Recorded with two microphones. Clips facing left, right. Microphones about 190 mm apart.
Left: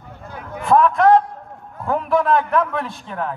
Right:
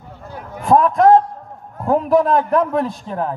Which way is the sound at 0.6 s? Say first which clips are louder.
Right 2 dB; 40° right (ahead or behind).